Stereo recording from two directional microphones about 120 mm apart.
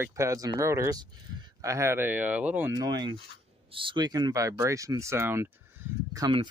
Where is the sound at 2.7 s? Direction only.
35° right (ahead or behind).